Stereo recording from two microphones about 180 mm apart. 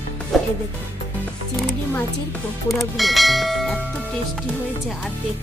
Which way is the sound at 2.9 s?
Centre (ahead or behind).